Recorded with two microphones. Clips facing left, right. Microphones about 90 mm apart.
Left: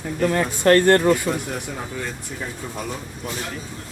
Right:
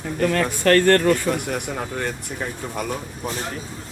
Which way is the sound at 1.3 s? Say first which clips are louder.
Right 2 dB; 60° right (ahead or behind).